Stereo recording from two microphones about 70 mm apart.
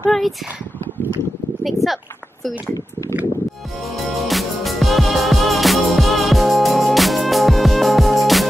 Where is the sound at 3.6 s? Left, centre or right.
Centre.